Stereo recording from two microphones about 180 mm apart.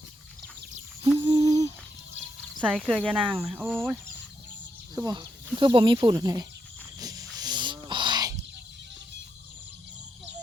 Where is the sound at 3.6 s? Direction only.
Centre (ahead or behind).